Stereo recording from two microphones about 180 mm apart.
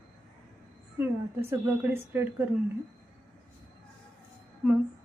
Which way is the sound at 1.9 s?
10° right (ahead or behind).